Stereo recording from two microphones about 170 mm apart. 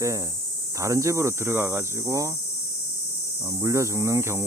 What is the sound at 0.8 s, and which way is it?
Speech, 20° right (ahead or behind).